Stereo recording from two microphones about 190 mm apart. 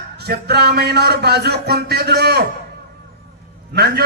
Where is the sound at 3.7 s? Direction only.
55° right (ahead or behind).